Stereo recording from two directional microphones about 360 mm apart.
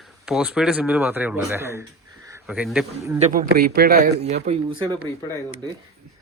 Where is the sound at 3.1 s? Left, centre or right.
Right.